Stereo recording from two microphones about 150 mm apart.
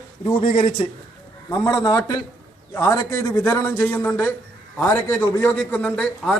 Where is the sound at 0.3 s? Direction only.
35° left (ahead or behind).